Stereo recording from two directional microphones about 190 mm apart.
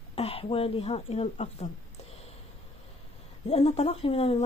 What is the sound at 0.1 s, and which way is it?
Speech, 30° left (ahead or behind).